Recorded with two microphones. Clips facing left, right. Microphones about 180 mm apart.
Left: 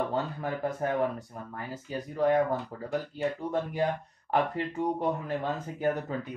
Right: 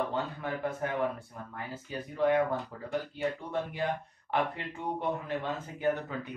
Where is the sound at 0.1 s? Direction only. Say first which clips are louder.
Left 3 dB; 40° left (ahead or behind).